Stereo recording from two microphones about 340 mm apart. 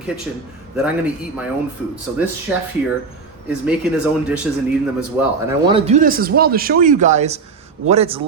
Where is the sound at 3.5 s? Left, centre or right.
Centre.